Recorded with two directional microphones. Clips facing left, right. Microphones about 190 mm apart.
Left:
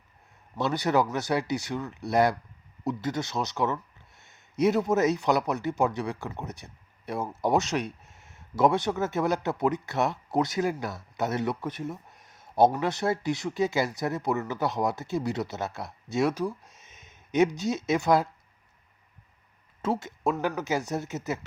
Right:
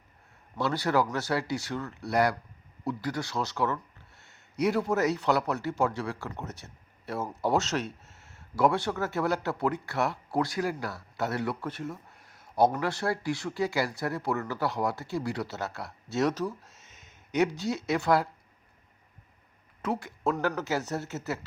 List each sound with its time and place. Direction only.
0.5 s speech: 20° left (ahead or behind)
19.8 s speech: 25° left (ahead or behind)